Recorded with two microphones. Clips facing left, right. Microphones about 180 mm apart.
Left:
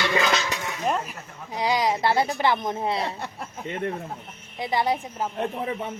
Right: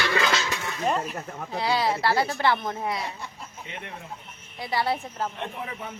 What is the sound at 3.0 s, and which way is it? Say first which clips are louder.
Speech: left 5 dB; 65° left (ahead or behind).